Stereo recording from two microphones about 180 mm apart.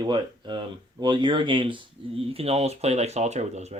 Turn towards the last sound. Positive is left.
turn(degrees=-40)  # may be behind; listen again after turning